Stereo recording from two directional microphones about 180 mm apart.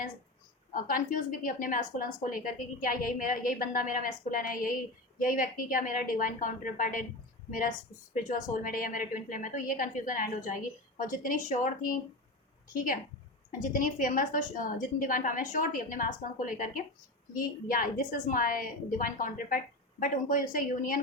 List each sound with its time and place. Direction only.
0.7 s a woman's voice: 50° left (ahead or behind)
8.1 s a woman's voice: 45° left (ahead or behind)